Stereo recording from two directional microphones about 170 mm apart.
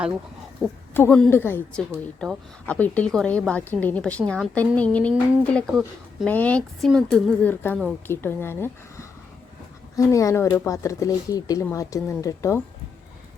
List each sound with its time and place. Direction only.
0.9 s a woman's voice: 10° left (ahead or behind)
1.9 s speech: 5° right (ahead or behind)
2.6 s a woman's voice: 10° left (ahead or behind)